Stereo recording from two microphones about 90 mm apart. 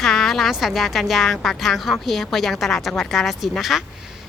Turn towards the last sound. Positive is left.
turn(degrees=0)  # may be behind; listen again after turning